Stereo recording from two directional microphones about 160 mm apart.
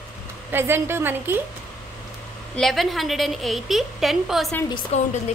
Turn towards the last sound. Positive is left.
turn(degrees=45)  # may be behind; listen again after turning